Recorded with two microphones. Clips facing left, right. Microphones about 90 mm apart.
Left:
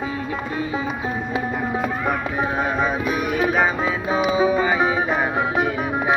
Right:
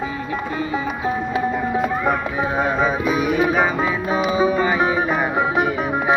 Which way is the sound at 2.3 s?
5° right (ahead or behind).